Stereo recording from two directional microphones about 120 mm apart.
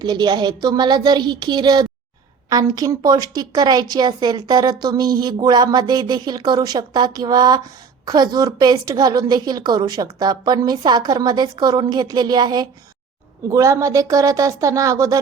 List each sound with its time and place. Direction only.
0.0 s a woman's voice: 35° right (ahead or behind)